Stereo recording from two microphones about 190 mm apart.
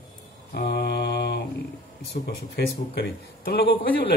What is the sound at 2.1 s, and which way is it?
A man's voice, 55° left (ahead or behind).